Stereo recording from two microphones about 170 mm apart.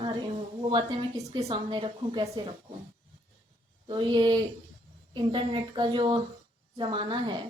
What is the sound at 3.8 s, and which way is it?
Speech, 30° right (ahead or behind).